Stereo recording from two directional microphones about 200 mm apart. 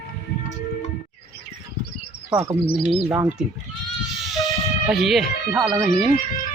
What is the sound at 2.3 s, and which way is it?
Speech, 25° right (ahead or behind).